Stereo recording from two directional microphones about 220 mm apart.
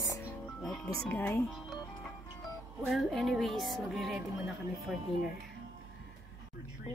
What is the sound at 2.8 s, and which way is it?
A woman's voice, centre (ahead or behind).